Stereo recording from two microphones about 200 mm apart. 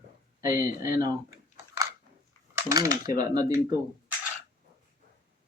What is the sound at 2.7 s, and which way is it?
Speech, 15° right (ahead or behind).